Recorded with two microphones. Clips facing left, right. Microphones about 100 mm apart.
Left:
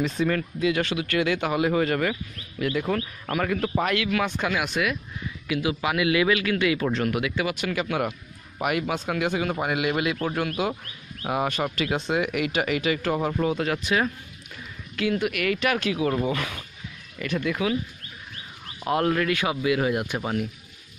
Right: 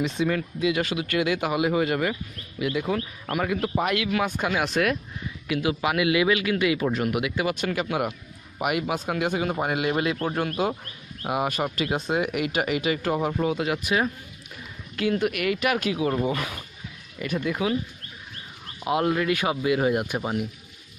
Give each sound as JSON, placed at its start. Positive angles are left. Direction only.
{"t": 0.3, "sound": "speech", "side_deg": -15}
{"t": 6.9, "sound": "speech", "side_deg": -15}
{"t": 11.8, "sound": "speech", "side_deg": -25}
{"t": 15.0, "sound": "speech", "side_deg": -25}
{"t": 18.9, "sound": "speech", "side_deg": -10}